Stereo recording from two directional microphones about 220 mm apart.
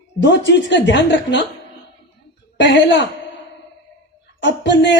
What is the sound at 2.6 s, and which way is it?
Speech, 55° left (ahead or behind).